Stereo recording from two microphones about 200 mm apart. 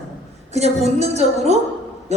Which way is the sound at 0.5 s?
30° right (ahead or behind).